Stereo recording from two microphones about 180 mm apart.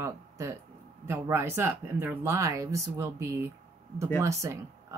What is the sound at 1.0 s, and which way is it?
A woman's voice, 15° right (ahead or behind).